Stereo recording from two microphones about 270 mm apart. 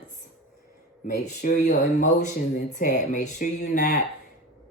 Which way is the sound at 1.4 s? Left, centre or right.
Left.